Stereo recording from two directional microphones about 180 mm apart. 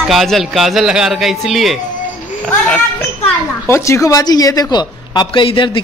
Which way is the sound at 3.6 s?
15° left (ahead or behind).